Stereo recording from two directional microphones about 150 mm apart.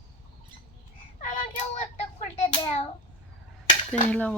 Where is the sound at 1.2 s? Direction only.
55° left (ahead or behind).